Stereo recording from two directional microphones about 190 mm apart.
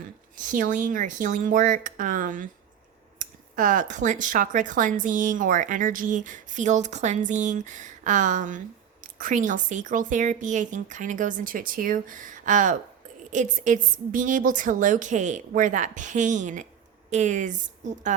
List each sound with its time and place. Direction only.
0.3 s speech: 45° right (ahead or behind)